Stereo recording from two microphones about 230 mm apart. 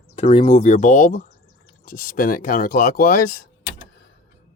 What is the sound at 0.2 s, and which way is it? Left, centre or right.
Speech, left.